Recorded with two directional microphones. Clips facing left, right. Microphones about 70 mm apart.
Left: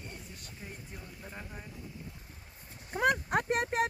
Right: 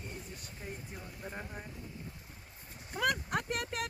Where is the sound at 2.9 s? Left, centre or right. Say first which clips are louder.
Left 4 dB; left.